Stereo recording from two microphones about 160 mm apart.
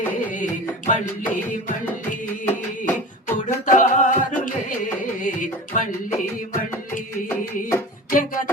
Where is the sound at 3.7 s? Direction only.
50° left (ahead or behind).